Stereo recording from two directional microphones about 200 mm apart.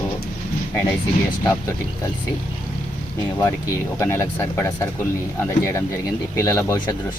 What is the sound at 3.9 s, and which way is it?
Speech, 15° left (ahead or behind).